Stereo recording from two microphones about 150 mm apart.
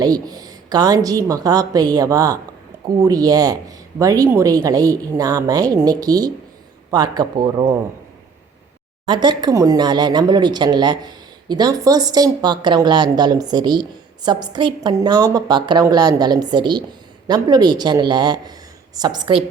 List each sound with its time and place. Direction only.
0.0 s speech: 25° right (ahead or behind)
9.0 s a woman's voice: 30° right (ahead or behind)